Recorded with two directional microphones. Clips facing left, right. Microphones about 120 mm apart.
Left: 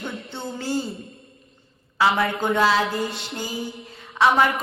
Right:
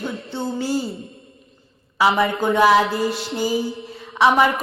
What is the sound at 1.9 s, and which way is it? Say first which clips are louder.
A woman's voice: right 3 dB; 15° right (ahead or behind).